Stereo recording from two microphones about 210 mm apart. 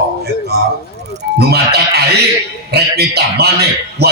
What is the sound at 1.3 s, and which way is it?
A man's voice, 50° right (ahead or behind).